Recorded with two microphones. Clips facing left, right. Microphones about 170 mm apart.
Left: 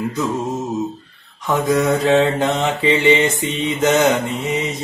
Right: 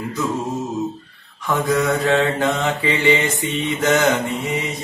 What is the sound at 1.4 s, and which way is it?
Mantra, 20° left (ahead or behind).